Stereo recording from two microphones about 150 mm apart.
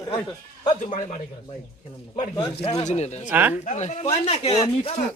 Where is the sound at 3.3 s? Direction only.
10° right (ahead or behind).